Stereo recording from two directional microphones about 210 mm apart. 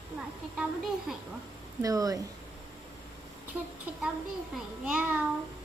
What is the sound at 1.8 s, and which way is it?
Speech, 15° right (ahead or behind).